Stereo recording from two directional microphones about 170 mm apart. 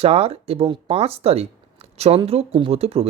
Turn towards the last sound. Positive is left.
turn(degrees=-35)  # may be behind; listen again after turning